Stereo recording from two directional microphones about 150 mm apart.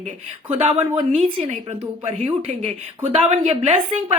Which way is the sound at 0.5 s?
40° right (ahead or behind).